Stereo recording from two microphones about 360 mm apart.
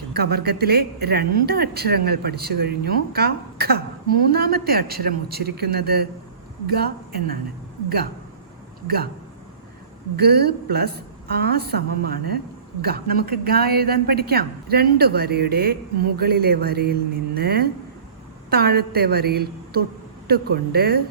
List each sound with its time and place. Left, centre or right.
0.1 s a woman's voice: right
10.2 s a woman's voice: right